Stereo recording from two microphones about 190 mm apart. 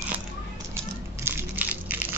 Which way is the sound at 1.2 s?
10° right (ahead or behind).